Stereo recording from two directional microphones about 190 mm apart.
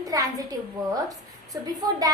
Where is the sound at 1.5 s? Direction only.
20° right (ahead or behind).